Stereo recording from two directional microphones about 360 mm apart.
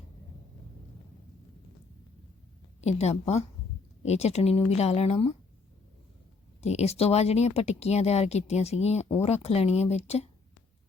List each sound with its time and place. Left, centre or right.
2.8 s speech: centre
6.6 s speech: centre